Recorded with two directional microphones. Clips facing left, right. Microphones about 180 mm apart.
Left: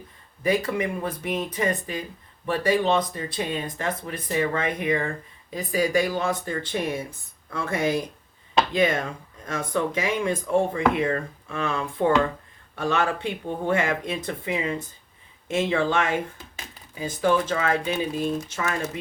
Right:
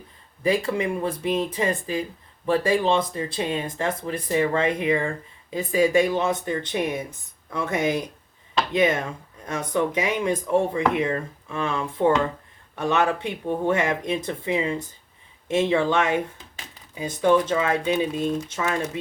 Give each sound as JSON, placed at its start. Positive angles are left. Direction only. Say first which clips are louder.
{"t": 0.4, "sound": "speech", "louder": "right 1 dB", "side_deg": -25}